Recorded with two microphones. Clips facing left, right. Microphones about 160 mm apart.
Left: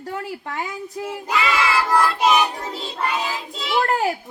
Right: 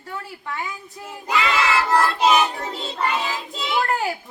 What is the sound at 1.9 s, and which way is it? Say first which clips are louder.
Music: even; centre (ahead or behind).